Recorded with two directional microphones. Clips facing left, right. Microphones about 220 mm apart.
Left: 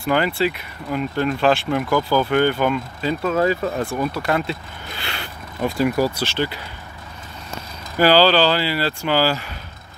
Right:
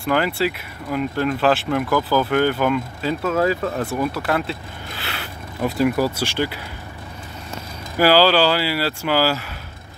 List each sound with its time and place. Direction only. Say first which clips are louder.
0.0 s speech: left 1 dB; centre (ahead or behind)
8.0 s speech: even; 5° right (ahead or behind)